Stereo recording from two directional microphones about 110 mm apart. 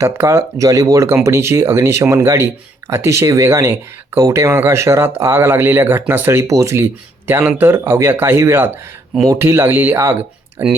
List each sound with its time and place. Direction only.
0.0 s speech: 25° right (ahead or behind)